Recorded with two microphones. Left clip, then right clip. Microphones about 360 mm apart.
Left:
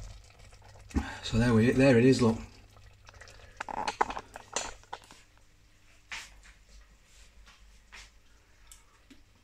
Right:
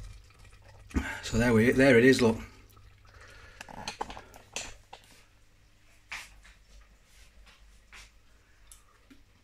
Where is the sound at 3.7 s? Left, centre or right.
Left.